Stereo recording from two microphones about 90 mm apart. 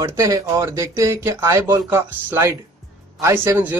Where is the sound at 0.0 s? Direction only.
35° right (ahead or behind).